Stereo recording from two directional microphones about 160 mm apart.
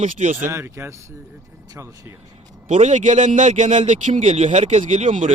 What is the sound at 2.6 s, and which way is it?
A man's voice, 50° right (ahead or behind).